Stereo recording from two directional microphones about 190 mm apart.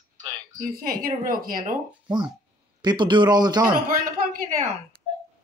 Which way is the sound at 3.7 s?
50° right (ahead or behind).